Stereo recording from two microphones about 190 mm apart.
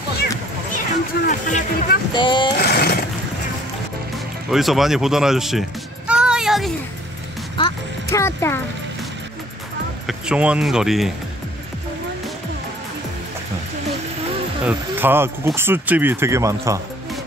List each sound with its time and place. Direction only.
1.2 s speech: 45° left (ahead or behind)
2.1 s speech: 25° left (ahead or behind)
2.6 s a sound: 55° left (ahead or behind)
4.5 s speech: centre (ahead or behind)
7.6 s speech: 25° left (ahead or behind)
8.1 s speech: 15° left (ahead or behind)
10.0 s speech: 5° right (ahead or behind)
14.6 s speech: 10° right (ahead or behind)